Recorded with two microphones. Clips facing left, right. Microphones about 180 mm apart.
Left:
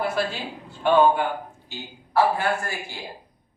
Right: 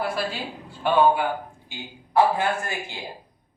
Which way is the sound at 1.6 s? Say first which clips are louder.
Left 1 dB; 15° right (ahead or behind).